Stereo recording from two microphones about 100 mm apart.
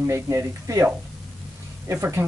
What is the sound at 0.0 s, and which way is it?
Speech, 30° right (ahead or behind).